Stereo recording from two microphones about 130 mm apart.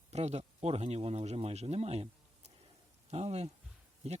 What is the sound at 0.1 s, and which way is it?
Speech, 55° right (ahead or behind).